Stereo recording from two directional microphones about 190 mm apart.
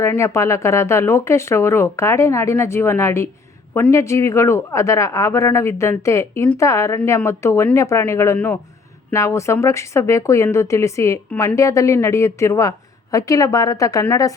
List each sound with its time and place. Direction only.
0.0 s speech: 15° left (ahead or behind)